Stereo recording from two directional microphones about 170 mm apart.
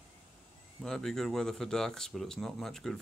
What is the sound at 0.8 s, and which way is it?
Speech, centre (ahead or behind).